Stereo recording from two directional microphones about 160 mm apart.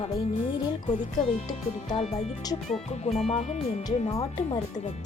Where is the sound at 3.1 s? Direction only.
40° left (ahead or behind).